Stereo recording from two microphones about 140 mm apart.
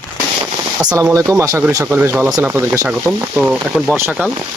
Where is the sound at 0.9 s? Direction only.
20° right (ahead or behind).